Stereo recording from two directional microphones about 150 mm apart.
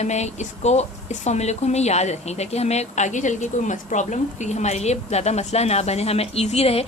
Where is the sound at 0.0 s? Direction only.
50° left (ahead or behind).